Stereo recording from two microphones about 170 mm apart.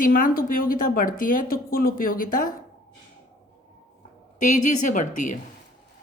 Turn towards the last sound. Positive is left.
turn(degrees=50)  # may be behind; listen again after turning